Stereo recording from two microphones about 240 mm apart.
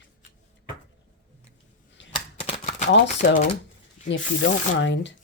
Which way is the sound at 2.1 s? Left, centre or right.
Left.